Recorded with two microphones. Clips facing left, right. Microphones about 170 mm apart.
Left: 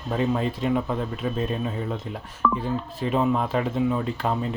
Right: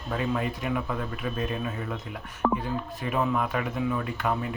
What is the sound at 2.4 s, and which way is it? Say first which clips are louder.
Speech: left 1 dB; 45° right (ahead or behind).